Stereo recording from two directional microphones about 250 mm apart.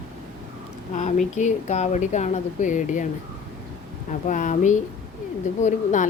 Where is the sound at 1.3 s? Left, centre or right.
Left.